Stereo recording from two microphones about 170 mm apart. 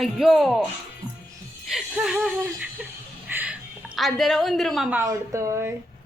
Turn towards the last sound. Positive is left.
turn(degrees=-15)  # may be behind; listen again after turning